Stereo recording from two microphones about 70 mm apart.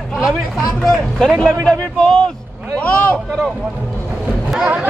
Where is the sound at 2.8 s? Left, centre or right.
Left.